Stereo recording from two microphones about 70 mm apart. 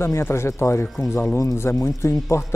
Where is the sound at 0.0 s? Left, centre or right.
Left.